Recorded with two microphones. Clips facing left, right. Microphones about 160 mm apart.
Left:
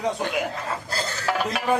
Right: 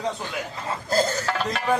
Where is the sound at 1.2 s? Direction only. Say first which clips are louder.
Left 1 dB; 10° left (ahead or behind).